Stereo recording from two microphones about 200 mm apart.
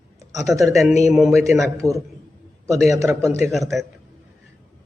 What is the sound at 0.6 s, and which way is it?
Speech, centre (ahead or behind).